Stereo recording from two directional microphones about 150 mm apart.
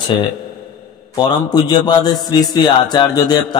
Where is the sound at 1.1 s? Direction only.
30° left (ahead or behind).